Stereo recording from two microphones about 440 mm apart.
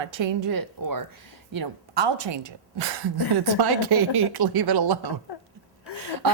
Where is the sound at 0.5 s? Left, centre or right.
Right.